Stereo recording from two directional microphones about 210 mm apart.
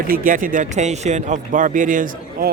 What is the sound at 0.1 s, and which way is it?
Speech, 40° right (ahead or behind).